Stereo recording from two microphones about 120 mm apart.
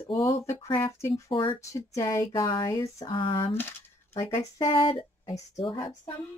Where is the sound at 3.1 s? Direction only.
45° left (ahead or behind).